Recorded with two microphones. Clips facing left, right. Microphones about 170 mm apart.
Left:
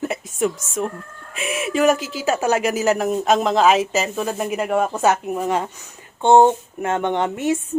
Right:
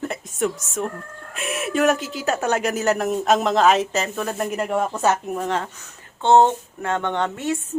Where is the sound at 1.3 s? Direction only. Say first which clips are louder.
Left 2 dB; centre (ahead or behind).